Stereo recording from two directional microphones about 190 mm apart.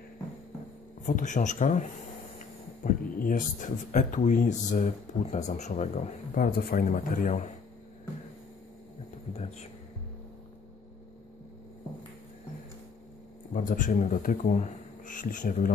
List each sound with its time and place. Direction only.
1.0 s speech: 40° left (ahead or behind)
9.3 s a sound: 35° left (ahead or behind)
13.5 s speech: 45° left (ahead or behind)